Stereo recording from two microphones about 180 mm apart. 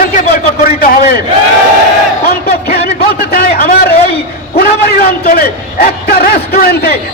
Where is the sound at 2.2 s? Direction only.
55° left (ahead or behind).